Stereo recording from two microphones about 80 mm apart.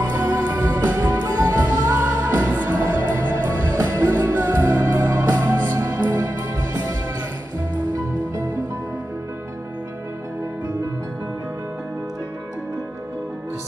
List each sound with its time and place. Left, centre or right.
0.0 s music: right
3.7 s music: right
4.1 s music: right